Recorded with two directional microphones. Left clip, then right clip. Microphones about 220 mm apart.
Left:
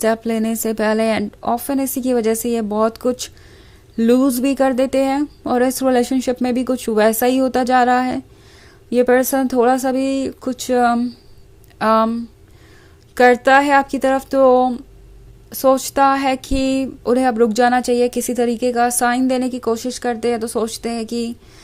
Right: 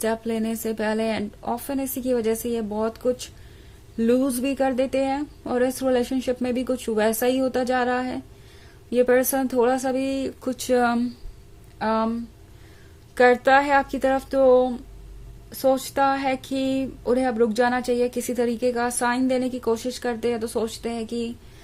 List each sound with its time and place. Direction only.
0.0 s speech: 25° left (ahead or behind)